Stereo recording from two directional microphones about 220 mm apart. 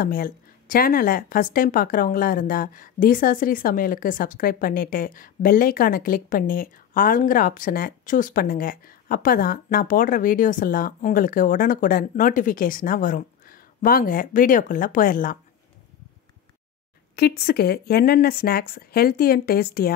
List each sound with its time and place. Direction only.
0.0 s a woman's voice: 40° left (ahead or behind)
17.1 s speech: 45° left (ahead or behind)